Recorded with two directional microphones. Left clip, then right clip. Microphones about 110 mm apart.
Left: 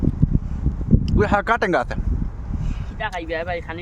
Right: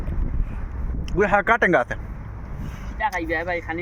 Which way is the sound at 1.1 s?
25° left (ahead or behind).